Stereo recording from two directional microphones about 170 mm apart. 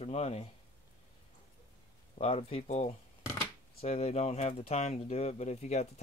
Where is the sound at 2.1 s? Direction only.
35° left (ahead or behind).